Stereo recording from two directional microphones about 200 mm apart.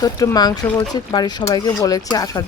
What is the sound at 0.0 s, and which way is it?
Speech, 20° left (ahead or behind).